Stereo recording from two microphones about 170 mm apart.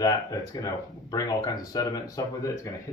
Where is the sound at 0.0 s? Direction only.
20° left (ahead or behind).